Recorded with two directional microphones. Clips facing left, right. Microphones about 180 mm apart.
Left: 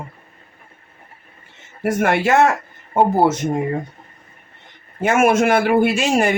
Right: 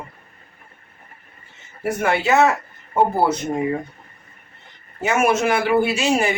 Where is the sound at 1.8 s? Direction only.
55° left (ahead or behind).